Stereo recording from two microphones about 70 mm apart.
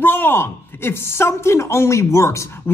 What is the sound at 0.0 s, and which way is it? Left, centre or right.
A woman's voice, left.